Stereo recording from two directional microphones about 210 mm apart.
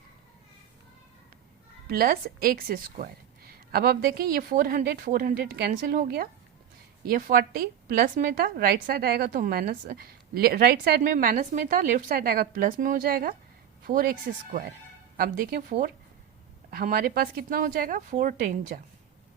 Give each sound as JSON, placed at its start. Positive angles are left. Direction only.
{"t": 1.9, "sound": "a woman's voice", "side_deg": -45}
{"t": 16.7, "sound": "speech", "side_deg": -45}